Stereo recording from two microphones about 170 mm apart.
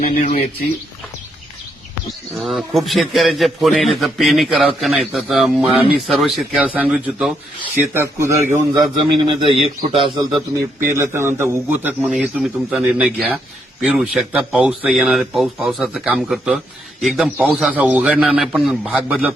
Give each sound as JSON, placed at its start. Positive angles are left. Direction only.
{"t": 0.0, "sound": "speech", "side_deg": 45}
{"t": 2.3, "sound": "a man's voice", "side_deg": 0}
{"t": 7.8, "sound": "speech", "side_deg": -15}
{"t": 9.1, "sound": "a man's voice", "side_deg": -30}
{"t": 12.0, "sound": "a man's voice", "side_deg": 0}